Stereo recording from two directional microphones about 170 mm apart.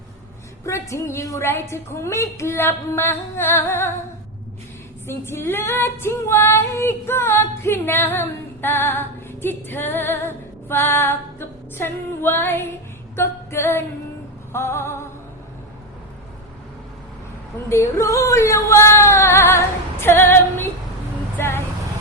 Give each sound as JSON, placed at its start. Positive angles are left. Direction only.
{"t": 0.6, "sound": "female singing", "side_deg": 15}
{"t": 5.0, "sound": "female singing", "side_deg": 15}
{"t": 13.1, "sound": "a capella", "side_deg": 15}
{"t": 14.5, "sound": "female singing", "side_deg": 15}
{"t": 17.7, "sound": "female singing", "side_deg": 15}
{"t": 21.3, "sound": "speech", "side_deg": 15}